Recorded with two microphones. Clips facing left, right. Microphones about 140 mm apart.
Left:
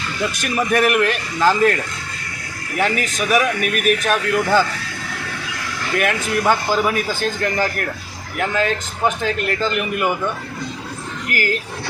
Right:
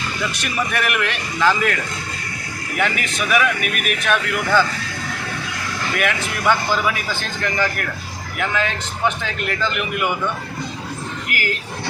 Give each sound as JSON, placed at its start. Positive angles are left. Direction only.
{"t": 0.4, "sound": "a man's voice", "side_deg": 40}
{"t": 2.7, "sound": "a man's voice", "side_deg": 35}
{"t": 6.0, "sound": "a man's voice", "side_deg": 40}
{"t": 11.3, "sound": "speech", "side_deg": 40}